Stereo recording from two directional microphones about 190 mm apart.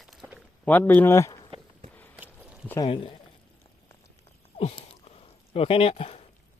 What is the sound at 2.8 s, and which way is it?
Speech, 30° left (ahead or behind).